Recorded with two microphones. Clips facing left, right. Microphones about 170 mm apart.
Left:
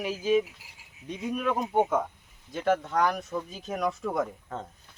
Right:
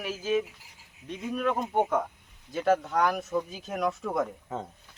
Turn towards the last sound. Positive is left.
turn(degrees=-5)  # may be behind; listen again after turning